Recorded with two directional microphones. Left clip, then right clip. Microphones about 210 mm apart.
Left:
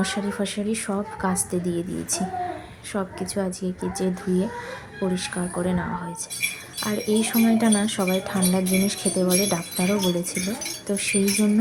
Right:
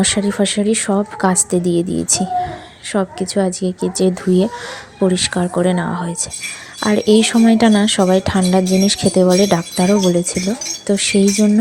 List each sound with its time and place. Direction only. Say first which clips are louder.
0.0 s speech: right 10 dB; 30° right (ahead or behind)